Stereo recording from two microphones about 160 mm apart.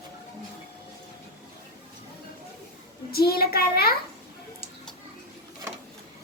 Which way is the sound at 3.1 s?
70° left (ahead or behind).